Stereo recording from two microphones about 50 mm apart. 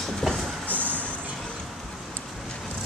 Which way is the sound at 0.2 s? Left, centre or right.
Centre.